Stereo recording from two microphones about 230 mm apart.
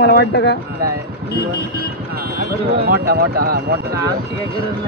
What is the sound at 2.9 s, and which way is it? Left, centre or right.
Speech, right.